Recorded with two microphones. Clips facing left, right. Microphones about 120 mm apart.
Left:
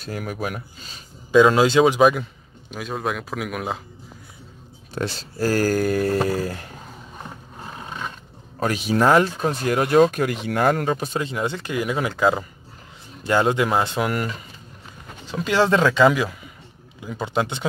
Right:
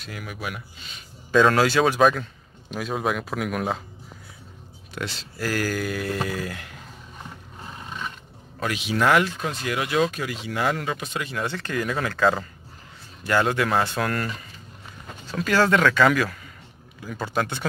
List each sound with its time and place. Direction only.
0.0 s speech: 40° left (ahead or behind)
1.3 s speech: 15° left (ahead or behind)
2.7 s speech: centre (ahead or behind)
4.9 s speech: 40° left (ahead or behind)
8.5 s speech: 40° left (ahead or behind)
11.2 s speech: 20° left (ahead or behind)